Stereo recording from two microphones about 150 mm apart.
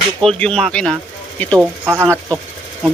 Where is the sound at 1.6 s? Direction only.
15° right (ahead or behind).